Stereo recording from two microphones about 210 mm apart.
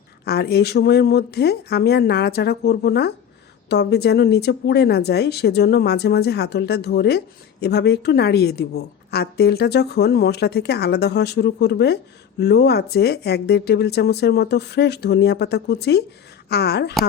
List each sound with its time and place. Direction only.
0.3 s speech: 50° left (ahead or behind)